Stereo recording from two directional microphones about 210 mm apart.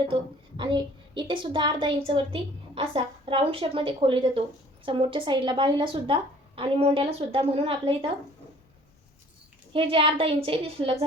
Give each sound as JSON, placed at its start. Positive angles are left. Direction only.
{"t": 0.1, "sound": "a woman's voice", "side_deg": -25}
{"t": 9.7, "sound": "a woman's voice", "side_deg": -25}